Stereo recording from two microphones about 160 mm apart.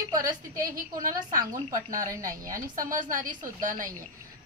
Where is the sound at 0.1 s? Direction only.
25° right (ahead or behind).